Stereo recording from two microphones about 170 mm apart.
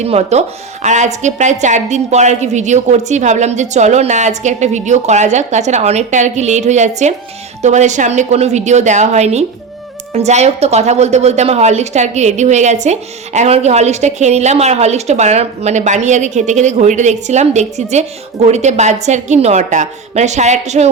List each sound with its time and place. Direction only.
0.0 s a woman's voice: 40° right (ahead or behind)